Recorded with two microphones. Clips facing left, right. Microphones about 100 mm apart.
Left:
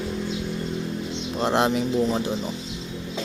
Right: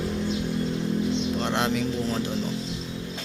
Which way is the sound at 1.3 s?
20° left (ahead or behind).